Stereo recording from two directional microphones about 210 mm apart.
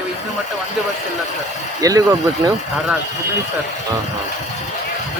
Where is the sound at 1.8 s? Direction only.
15° right (ahead or behind).